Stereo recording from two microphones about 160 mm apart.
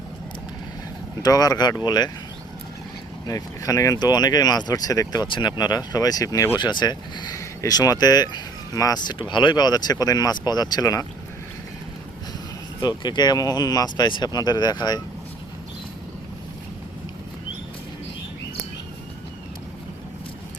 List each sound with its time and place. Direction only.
1.2 s speech: 25° left (ahead or behind)
3.2 s speech: 20° left (ahead or behind)
12.8 s speech: 25° left (ahead or behind)